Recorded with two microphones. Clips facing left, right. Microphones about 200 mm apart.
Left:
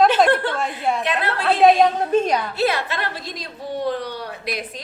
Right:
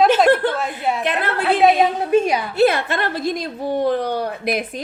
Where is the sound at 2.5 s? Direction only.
50° right (ahead or behind).